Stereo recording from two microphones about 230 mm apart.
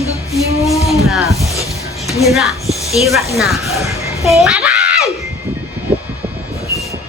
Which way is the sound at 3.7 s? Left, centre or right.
Centre.